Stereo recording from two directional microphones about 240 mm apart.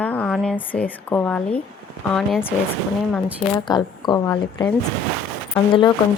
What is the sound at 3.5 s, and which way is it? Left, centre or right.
A woman's voice, centre.